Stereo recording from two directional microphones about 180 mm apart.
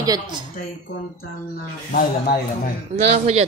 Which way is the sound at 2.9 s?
40° right (ahead or behind).